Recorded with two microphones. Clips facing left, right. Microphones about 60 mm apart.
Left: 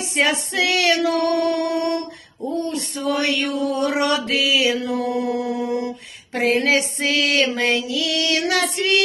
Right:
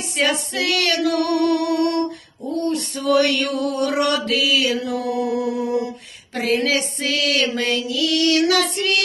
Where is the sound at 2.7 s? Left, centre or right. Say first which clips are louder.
Right 5 dB; centre.